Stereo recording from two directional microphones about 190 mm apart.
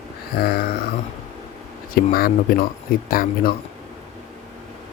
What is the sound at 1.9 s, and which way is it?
Speech, 50° left (ahead or behind).